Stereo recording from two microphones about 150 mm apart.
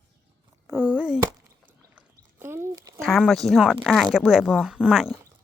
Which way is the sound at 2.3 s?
15° right (ahead or behind).